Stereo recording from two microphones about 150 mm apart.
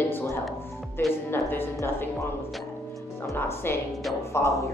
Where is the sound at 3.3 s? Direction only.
15° left (ahead or behind).